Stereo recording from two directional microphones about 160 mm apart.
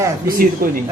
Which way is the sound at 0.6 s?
65° right (ahead or behind).